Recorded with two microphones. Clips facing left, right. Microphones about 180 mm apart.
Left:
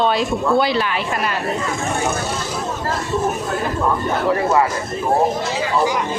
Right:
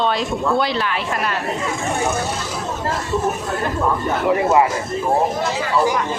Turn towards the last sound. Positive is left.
turn(degrees=-15)  # may be behind; listen again after turning